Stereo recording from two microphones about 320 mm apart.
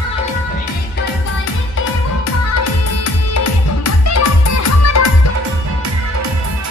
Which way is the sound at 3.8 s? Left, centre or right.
Left.